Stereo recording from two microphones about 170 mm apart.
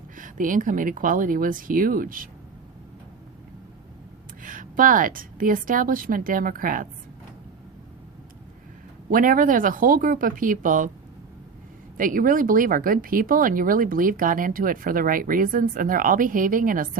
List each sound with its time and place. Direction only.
0.2 s speech: 50° right (ahead or behind)
4.4 s speech: 55° right (ahead or behind)
9.0 s speech: 55° right (ahead or behind)
11.9 s speech: 55° right (ahead or behind)